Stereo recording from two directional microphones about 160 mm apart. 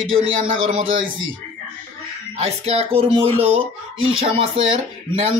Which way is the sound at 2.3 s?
40° right (ahead or behind).